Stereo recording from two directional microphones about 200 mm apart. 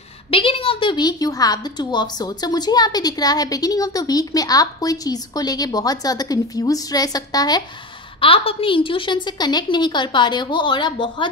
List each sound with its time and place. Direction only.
0.3 s a woman's voice: 30° left (ahead or behind)